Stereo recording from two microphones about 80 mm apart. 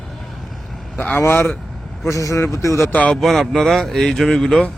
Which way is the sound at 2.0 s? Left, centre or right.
Left.